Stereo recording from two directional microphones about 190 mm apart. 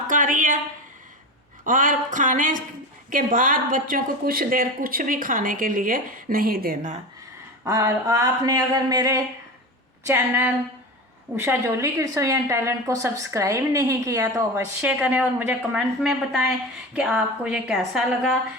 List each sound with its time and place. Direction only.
0.1 s a sound: 45° right (ahead or behind)
1.6 s a woman's voice: 45° right (ahead or behind)
7.6 s a woman's voice: 15° right (ahead or behind)